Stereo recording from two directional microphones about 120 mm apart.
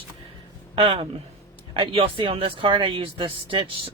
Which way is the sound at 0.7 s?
45° right (ahead or behind).